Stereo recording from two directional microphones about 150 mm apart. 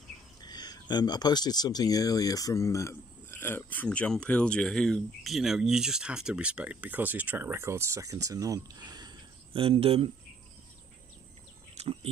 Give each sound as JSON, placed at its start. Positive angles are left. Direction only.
{"t": 0.4, "sound": "speech", "side_deg": 25}
{"t": 11.7, "sound": "bird", "side_deg": -45}